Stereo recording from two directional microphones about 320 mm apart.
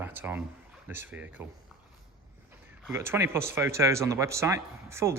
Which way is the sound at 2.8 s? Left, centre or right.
Centre.